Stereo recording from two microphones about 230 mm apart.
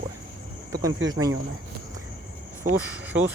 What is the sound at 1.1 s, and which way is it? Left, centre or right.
Speech, centre.